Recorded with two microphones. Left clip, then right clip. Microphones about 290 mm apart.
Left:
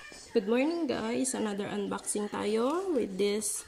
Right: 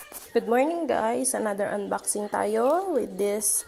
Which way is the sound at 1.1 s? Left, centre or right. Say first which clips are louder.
Right 6 dB; centre.